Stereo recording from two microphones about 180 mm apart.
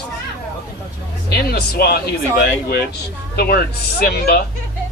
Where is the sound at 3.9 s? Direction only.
60° left (ahead or behind).